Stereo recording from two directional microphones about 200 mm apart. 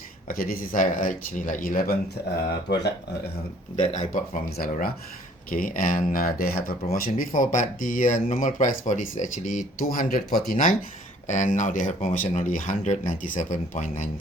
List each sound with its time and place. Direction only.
0.3 s speech: 45° left (ahead or behind)
2.6 s speech: 60° left (ahead or behind)
3.8 s speech: 35° left (ahead or behind)